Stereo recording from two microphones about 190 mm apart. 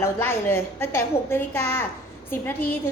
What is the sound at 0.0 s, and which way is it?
A woman's voice, 10° left (ahead or behind).